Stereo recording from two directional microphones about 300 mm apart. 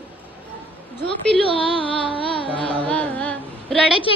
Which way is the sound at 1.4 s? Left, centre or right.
Centre.